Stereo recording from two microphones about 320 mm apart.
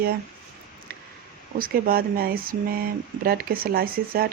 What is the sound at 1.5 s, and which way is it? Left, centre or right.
Speech, right.